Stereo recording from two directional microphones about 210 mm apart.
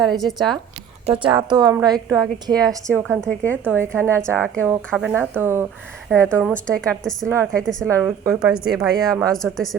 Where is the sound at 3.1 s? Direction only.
5° left (ahead or behind).